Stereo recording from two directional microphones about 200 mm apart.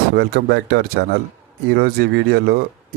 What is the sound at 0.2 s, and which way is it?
Speech, 55° right (ahead or behind).